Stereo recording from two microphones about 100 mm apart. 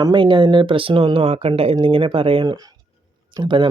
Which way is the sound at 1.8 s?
60° right (ahead or behind).